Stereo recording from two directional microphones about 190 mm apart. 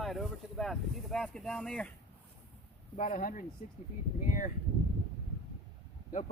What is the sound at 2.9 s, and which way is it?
Speech, 45° left (ahead or behind).